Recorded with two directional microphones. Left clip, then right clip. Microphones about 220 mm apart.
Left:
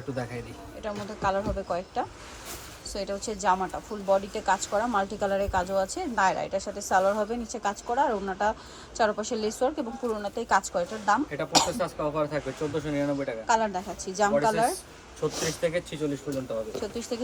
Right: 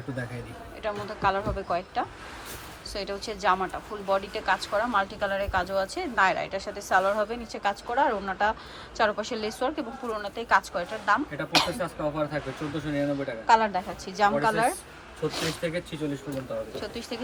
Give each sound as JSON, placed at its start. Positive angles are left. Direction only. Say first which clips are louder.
{"t": 0.8, "sound": "a woman's voice", "louder": "right 2 dB", "side_deg": 15}
{"t": 11.8, "sound": "a woman's voice", "louder": "left 1 dB", "side_deg": 5}
{"t": 16.8, "sound": "a woman's voice", "louder": "left 2 dB", "side_deg": 15}